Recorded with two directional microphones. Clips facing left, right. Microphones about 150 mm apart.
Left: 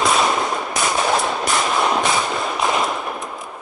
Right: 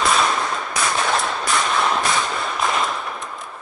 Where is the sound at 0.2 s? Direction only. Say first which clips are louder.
Left 2 dB; 20° left (ahead or behind).